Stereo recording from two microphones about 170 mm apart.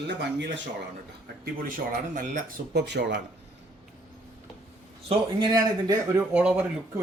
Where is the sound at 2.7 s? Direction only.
85° right.